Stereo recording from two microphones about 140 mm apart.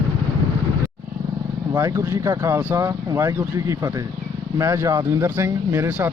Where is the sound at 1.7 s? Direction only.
25° right (ahead or behind).